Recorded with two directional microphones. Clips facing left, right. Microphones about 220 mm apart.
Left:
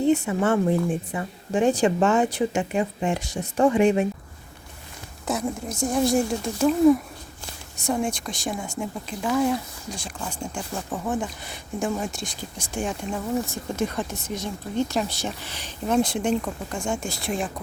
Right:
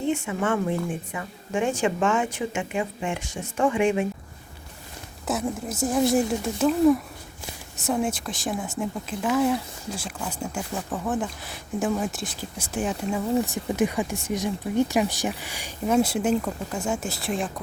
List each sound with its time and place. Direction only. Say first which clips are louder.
0.1 s a woman's voice: left 2 dB; 40° left (ahead or behind)
5.2 s speech: even; 5° right (ahead or behind)
13.4 s speech: right 3 dB; 15° right (ahead or behind); by 17.5 s centre (ahead or behind)